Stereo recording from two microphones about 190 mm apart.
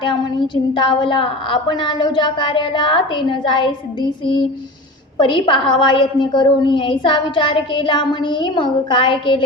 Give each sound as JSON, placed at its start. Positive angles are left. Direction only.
{"t": 0.0, "sound": "a woman's voice", "side_deg": 25}
{"t": 5.1, "sound": "a woman's voice", "side_deg": 25}